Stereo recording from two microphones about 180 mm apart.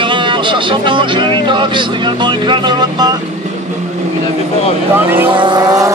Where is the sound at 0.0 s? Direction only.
25° right (ahead or behind).